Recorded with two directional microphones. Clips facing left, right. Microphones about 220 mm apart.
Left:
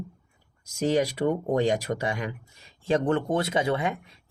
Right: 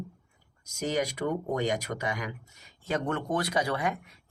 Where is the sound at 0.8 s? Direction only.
30° left (ahead or behind).